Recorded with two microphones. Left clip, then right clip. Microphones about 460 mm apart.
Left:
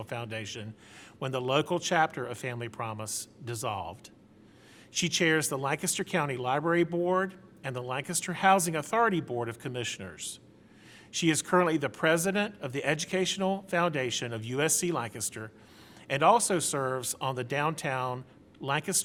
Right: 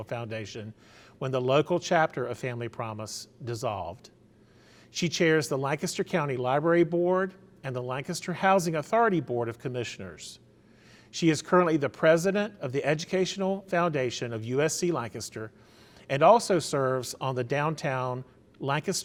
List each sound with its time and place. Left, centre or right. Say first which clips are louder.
0.0 s speech: right 2 dB; right
4.9 s speech: right 2 dB; right
16.0 s speech: right 3 dB; right